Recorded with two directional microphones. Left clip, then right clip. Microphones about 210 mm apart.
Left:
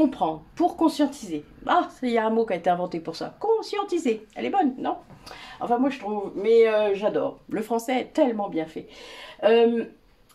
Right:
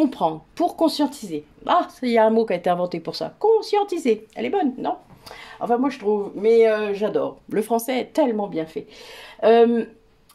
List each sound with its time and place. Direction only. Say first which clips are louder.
0.0 s a woman's voice: right 2 dB; 45° right (ahead or behind)